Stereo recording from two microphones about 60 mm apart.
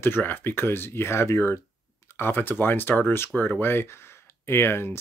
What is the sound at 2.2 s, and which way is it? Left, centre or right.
Speech, left.